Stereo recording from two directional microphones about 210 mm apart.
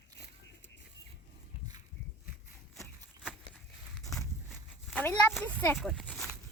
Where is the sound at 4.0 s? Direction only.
Centre (ahead or behind).